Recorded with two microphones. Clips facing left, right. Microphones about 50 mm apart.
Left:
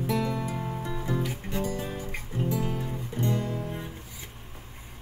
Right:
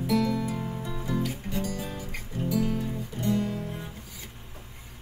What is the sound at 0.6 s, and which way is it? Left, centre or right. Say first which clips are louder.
Music: left 1 dB; centre.